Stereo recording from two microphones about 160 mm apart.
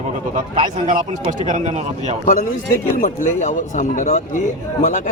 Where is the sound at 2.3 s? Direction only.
60° left (ahead or behind).